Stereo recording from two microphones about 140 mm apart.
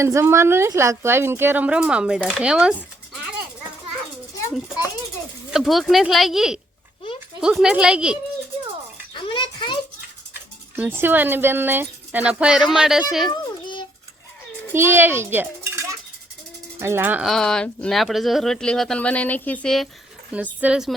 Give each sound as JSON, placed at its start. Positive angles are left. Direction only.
{"t": 0.0, "sound": "speech", "side_deg": -20}
{"t": 5.5, "sound": "speech", "side_deg": 0}
{"t": 9.1, "sound": "a sound", "side_deg": 35}
{"t": 10.8, "sound": "speech", "side_deg": -15}
{"t": 13.3, "sound": "a sound", "side_deg": 35}
{"t": 14.7, "sound": "a child's voice", "side_deg": -15}
{"t": 17.2, "sound": "speech", "side_deg": 5}
{"t": 20.3, "sound": "speech", "side_deg": -10}